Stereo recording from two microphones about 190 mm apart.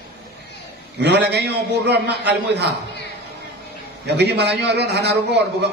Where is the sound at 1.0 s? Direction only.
60° right (ahead or behind).